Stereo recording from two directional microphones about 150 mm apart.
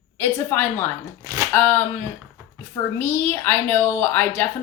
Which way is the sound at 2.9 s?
15° left (ahead or behind).